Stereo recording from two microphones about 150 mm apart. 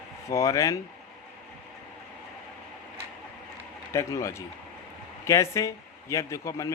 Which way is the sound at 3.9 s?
20° left (ahead or behind).